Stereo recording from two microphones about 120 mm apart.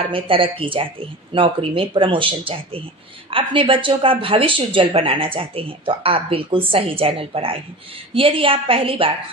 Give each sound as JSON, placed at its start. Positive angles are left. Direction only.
{"t": 0.1, "sound": "speech", "side_deg": -50}